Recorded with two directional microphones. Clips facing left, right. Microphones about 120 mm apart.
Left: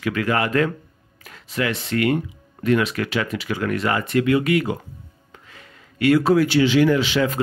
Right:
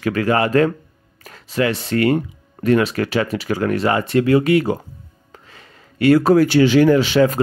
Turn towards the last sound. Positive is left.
turn(degrees=-40)  # may be behind; listen again after turning